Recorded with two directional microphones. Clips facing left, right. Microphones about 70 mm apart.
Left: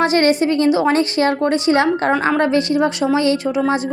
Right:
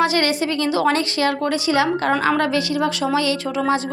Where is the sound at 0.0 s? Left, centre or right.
Left.